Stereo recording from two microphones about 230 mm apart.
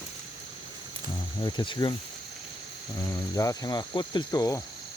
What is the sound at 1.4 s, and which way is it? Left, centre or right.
Speech, centre.